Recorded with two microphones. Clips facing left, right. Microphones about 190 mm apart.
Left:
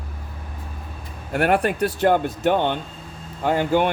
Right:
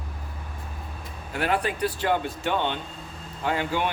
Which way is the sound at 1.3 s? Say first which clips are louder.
Left 6 dB; 55° left (ahead or behind).